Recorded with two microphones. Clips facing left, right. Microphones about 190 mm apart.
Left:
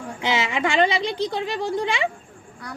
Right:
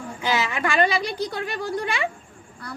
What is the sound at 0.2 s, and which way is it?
A child's voice, 20° left (ahead or behind).